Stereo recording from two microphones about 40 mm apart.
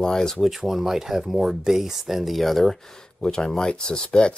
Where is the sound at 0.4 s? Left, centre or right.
Centre.